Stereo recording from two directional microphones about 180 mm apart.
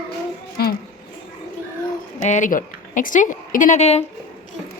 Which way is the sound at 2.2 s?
40° left (ahead or behind).